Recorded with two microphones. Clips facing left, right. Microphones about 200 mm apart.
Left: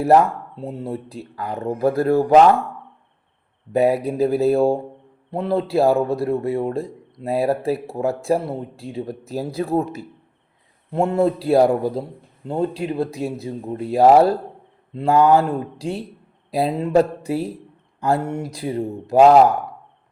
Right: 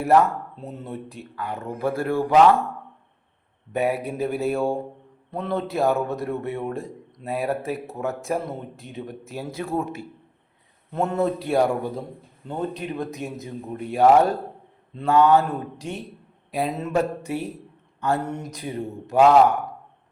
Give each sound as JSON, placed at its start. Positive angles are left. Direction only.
{"t": 0.0, "sound": "a man's voice", "side_deg": 35}
{"t": 3.7, "sound": "a man's voice", "side_deg": 35}